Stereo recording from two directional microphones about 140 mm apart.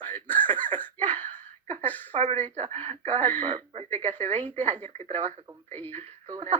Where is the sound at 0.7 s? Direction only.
10° left (ahead or behind).